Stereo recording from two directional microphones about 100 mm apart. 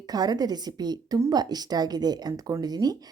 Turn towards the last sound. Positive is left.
turn(degrees=-40)  # may be behind; listen again after turning